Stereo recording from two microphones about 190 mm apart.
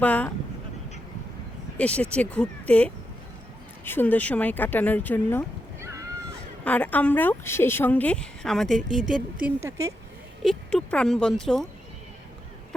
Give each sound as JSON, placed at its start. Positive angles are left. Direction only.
{"t": 0.0, "sound": "a woman's voice", "side_deg": 10}
{"t": 1.8, "sound": "a woman's voice", "side_deg": 5}
{"t": 5.8, "sound": "a sound", "side_deg": -15}
{"t": 6.7, "sound": "a woman's voice", "side_deg": 10}
{"t": 9.6, "sound": "speech", "side_deg": -15}
{"t": 10.4, "sound": "speech", "side_deg": 5}